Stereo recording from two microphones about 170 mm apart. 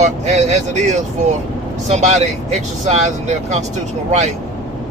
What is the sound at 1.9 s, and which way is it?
Speech, 40° right (ahead or behind).